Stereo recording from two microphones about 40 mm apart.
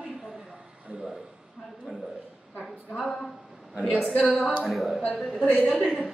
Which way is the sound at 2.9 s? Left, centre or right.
Centre.